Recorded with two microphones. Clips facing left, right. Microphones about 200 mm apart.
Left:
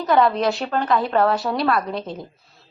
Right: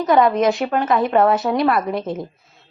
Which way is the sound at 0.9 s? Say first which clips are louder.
Right 3 dB; 20° right (ahead or behind).